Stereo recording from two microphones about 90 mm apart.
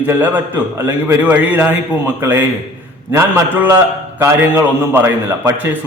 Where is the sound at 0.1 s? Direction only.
20° right (ahead or behind).